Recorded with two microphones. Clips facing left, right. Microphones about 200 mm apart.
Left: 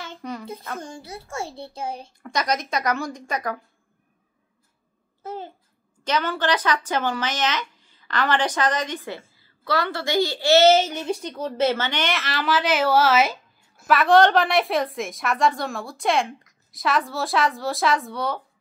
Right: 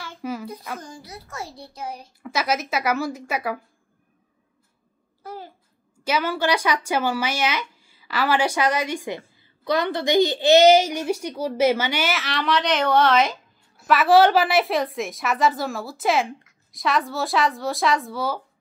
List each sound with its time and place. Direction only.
0.2 s a sound: 5° right (ahead or behind)
0.8 s a child's voice: 25° left (ahead or behind)
2.2 s a woman's voice: 5° right (ahead or behind)
5.2 s a child's voice: 25° left (ahead or behind)
6.0 s a woman's voice: 10° right (ahead or behind)